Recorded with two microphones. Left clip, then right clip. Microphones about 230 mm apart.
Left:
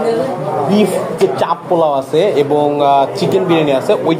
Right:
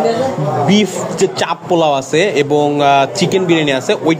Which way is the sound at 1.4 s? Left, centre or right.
Right.